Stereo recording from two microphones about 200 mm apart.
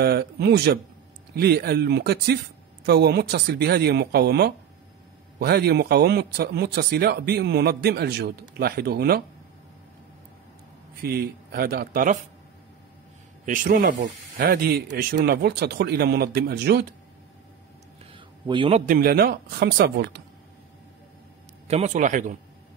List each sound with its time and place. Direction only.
0.0 s a man's voice: 55° right (ahead or behind)
11.0 s a man's voice: 50° right (ahead or behind)
13.5 s a man's voice: 40° right (ahead or behind)
18.1 s a man's voice: 25° right (ahead or behind); by 20.2 s 55° right (ahead or behind)
21.6 s a man's voice: 35° right (ahead or behind)